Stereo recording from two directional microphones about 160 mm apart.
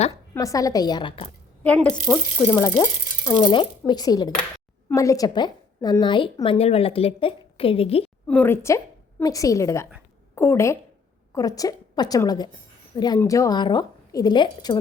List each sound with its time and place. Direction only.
0.3 s a woman's voice: 20° left (ahead or behind)
1.6 s speech: 10° left (ahead or behind)
2.0 s speech: 10° right (ahead or behind)
3.4 s a woman's voice: 30° left (ahead or behind)
8.3 s a woman's voice: 10° left (ahead or behind); by 14.8 s 30° left (ahead or behind)